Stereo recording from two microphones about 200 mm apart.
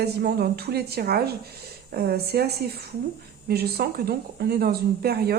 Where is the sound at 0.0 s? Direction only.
50° right (ahead or behind).